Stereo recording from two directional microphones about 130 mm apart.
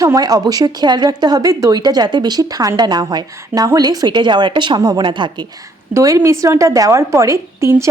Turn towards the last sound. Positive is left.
turn(degrees=-20)  # may be behind; listen again after turning